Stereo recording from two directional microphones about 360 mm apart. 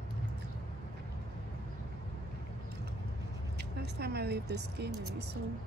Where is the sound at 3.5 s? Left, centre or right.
Right.